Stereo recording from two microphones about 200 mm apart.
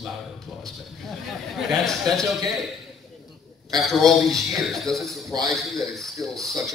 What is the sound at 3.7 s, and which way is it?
A man's voice, centre (ahead or behind).